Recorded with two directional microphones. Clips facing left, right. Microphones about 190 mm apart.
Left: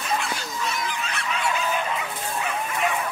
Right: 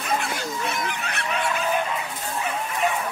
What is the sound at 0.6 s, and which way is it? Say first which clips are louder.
Goose: right 1 dB; 60° right (ahead or behind).